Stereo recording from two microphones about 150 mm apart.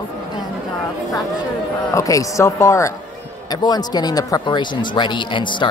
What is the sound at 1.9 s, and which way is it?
A man's voice, 20° left (ahead or behind).